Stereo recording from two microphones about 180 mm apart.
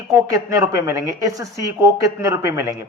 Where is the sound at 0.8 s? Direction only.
15° right (ahead or behind).